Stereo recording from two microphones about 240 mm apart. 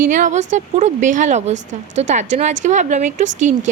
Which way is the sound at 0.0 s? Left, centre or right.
Right.